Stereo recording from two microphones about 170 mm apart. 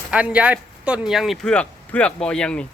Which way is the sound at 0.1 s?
5° right (ahead or behind).